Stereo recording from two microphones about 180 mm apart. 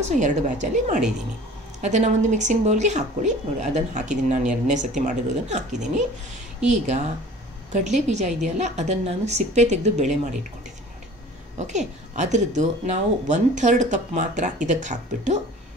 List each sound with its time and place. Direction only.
0.0 s a woman's voice: 40° right (ahead or behind)
11.5 s speech: 40° right (ahead or behind)